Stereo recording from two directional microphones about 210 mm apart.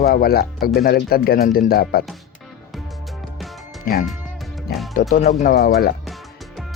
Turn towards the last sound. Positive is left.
turn(degrees=50)  # may be behind; listen again after turning